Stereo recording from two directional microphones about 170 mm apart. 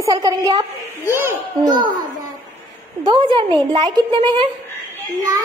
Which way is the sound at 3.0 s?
30° right (ahead or behind).